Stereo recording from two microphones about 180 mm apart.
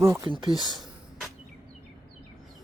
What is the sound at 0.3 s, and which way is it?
Speech, 25° right (ahead or behind).